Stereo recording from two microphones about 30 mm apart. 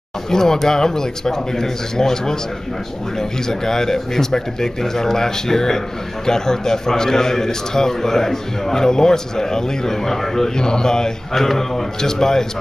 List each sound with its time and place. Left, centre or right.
0.3 s a man's voice: centre
10.5 s mantra: left
11.4 s a man's voice: centre